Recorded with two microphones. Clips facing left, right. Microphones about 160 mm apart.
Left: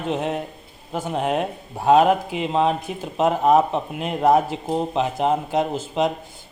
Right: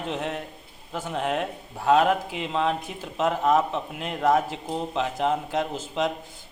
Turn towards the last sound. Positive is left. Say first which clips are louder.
# left 5 dB
turn(degrees=15)  # may be behind; listen again after turning